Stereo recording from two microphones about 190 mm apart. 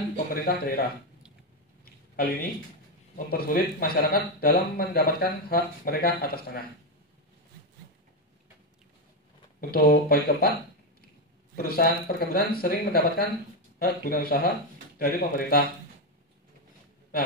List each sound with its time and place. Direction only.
0.3 s speech: 50° left (ahead or behind)
2.1 s speech: 50° left (ahead or behind)
9.6 s speech: 55° left (ahead or behind)
11.5 s speech: 50° left (ahead or behind)